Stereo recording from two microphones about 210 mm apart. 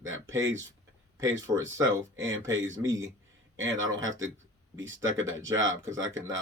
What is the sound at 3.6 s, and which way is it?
Speech, 65° right (ahead or behind).